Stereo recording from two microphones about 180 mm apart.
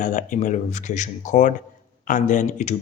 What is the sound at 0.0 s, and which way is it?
Speech, 45° left (ahead or behind).